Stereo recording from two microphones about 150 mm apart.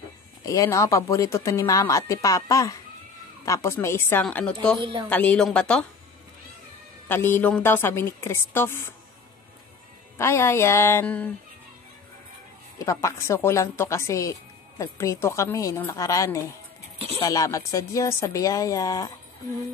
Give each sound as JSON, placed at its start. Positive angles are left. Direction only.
{"t": 0.5, "sound": "a woman's voice", "side_deg": 20}
{"t": 4.7, "sound": "speech", "side_deg": -30}
{"t": 5.1, "sound": "a woman's voice", "side_deg": 10}
{"t": 7.1, "sound": "a woman's voice", "side_deg": 15}
{"t": 10.1, "sound": "a woman's voice", "side_deg": 20}
{"t": 12.7, "sound": "speech", "side_deg": 20}